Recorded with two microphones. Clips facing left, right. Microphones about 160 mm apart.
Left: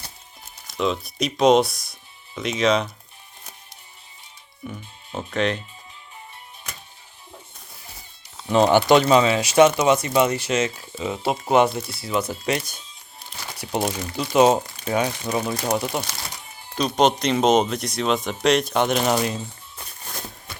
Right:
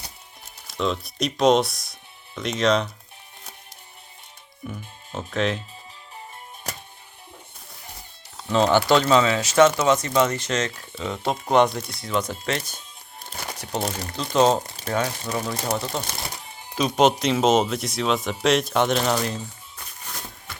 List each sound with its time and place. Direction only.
0.7 s speech: centre (ahead or behind)
4.6 s speech: centre (ahead or behind)
8.4 s speech: 15° left (ahead or behind)
13.4 s crumpling: 55° right (ahead or behind)
14.2 s speech: 10° left (ahead or behind)
16.7 s speech: 5° right (ahead or behind)
19.0 s speech: 15° left (ahead or behind)